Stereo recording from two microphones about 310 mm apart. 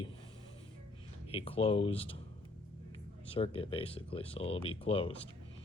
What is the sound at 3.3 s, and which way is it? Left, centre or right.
Speech, centre.